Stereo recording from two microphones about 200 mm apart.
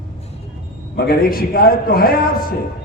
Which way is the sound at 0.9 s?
50° left (ahead or behind).